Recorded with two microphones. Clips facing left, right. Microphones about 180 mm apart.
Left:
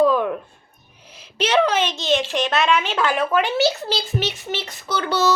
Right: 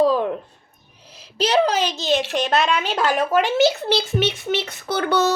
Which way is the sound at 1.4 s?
35° right (ahead or behind).